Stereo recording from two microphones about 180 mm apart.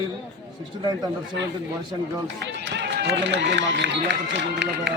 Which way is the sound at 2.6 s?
75° right (ahead or behind).